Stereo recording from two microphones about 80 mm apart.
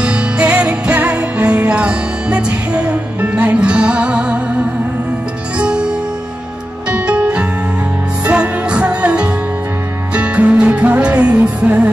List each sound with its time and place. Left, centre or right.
0.0 s music: centre
5.6 s music: centre